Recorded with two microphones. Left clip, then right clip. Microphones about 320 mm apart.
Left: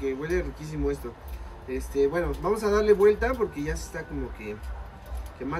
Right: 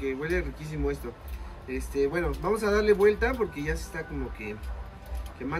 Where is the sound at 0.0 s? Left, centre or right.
Centre.